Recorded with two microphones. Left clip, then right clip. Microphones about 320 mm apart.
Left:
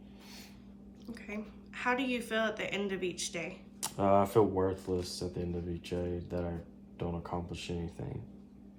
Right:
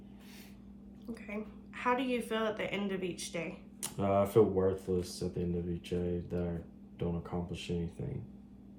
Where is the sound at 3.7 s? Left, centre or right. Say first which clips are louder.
Left 3 dB; centre.